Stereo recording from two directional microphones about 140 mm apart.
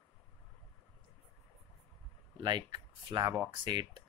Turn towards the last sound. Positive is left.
turn(degrees=-35)  # may be behind; listen again after turning